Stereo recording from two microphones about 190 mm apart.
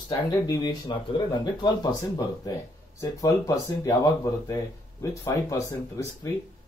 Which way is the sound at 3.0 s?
15° left (ahead or behind).